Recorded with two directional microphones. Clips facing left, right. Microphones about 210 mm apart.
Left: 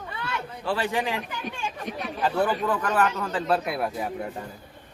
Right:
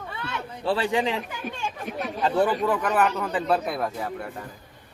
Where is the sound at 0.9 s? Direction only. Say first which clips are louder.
Right 3 dB; 20° right (ahead or behind).